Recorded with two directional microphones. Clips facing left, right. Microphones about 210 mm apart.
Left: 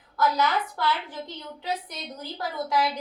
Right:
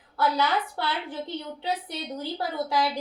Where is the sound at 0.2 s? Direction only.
30° right (ahead or behind).